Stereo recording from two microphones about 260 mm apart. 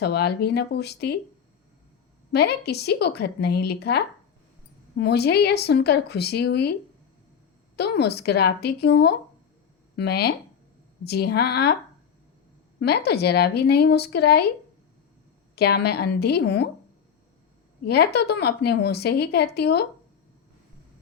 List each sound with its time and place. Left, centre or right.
0.0 s a woman's voice: left
2.3 s a woman's voice: left
7.8 s a woman's voice: left
12.8 s a woman's voice: left
15.5 s a woman's voice: left
17.8 s a woman's voice: left